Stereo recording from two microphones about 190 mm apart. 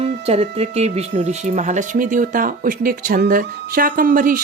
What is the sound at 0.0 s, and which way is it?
Speech, 30° right (ahead or behind).